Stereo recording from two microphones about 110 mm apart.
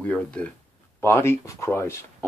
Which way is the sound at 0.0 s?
10° left (ahead or behind).